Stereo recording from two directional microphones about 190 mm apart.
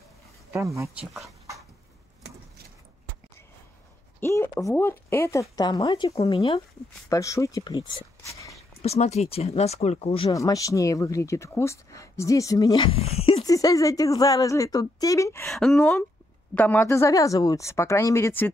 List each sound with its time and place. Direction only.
0.5 s speech: 15° right (ahead or behind)
4.2 s speech: 15° left (ahead or behind)
6.1 s speech: 30° left (ahead or behind)
7.1 s speech: 15° left (ahead or behind)
8.8 s speech: 35° left (ahead or behind)
10.3 s speech: 15° left (ahead or behind)
13.5 s speech: 20° left (ahead or behind)
15.5 s speech: centre (ahead or behind)
15.8 s speech: 15° left (ahead or behind)